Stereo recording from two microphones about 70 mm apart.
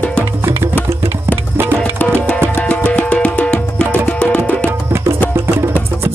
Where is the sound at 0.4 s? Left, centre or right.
Right.